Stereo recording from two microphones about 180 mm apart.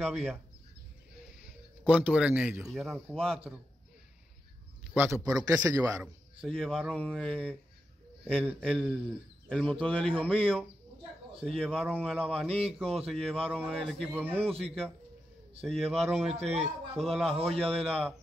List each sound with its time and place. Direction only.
0.0 s speech: centre (ahead or behind)
1.9 s speech: 5° right (ahead or behind)
4.9 s a man's voice: 10° right (ahead or behind)
6.4 s speech: 5° left (ahead or behind)
8.5 s speech: centre (ahead or behind)
12.4 s speech: 35° right (ahead or behind)
12.7 s speech: centre (ahead or behind)
14.1 s speech: 10° right (ahead or behind)
14.4 s speech: 35° right (ahead or behind)
15.9 s speech: centre (ahead or behind)
16.3 s speech: 35° right (ahead or behind)
17.0 s speech: centre (ahead or behind)